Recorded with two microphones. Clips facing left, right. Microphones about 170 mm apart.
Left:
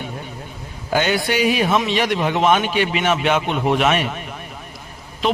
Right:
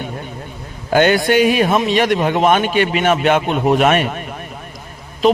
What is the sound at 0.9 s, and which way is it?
A man's voice, 55° right (ahead or behind).